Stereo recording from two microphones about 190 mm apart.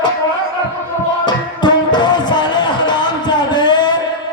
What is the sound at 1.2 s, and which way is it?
Music, 20° left (ahead or behind).